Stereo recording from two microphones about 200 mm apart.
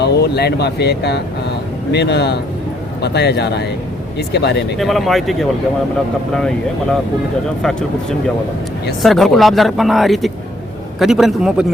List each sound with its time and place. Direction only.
0.0 s a man's voice: 55° left (ahead or behind)
4.8 s speech: centre (ahead or behind)
9.0 s speech: centre (ahead or behind)